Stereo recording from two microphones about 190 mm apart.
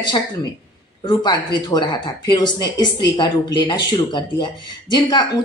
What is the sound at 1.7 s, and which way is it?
A woman's voice, 25° left (ahead or behind).